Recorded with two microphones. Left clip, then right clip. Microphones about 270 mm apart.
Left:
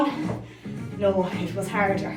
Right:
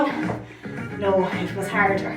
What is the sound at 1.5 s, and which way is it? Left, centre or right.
Speech, centre.